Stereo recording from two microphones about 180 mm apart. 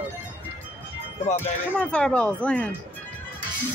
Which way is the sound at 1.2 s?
40° left (ahead or behind).